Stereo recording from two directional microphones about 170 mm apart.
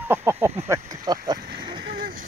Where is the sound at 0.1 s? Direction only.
15° right (ahead or behind).